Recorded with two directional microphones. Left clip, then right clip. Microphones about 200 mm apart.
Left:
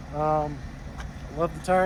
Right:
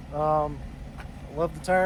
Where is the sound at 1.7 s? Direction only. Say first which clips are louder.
Left 1 dB; 40° right (ahead or behind).